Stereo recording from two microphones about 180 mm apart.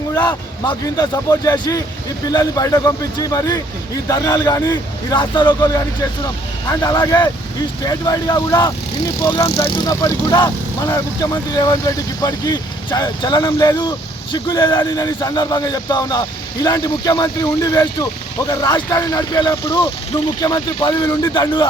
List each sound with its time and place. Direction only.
0.1 s speech: 25° left (ahead or behind)